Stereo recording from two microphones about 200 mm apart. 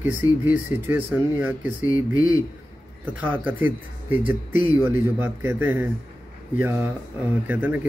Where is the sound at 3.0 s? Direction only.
10° right (ahead or behind).